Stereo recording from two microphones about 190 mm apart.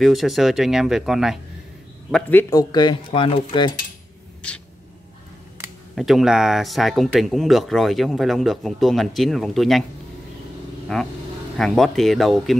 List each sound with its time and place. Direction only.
0.0 s speech: centre (ahead or behind)
2.2 s a man's voice: 10° left (ahead or behind)
2.7 s speech: 25° left (ahead or behind)
4.4 s a man's voice: 5° left (ahead or behind)
5.9 s speech: centre (ahead or behind)
10.9 s speech: 5° left (ahead or behind)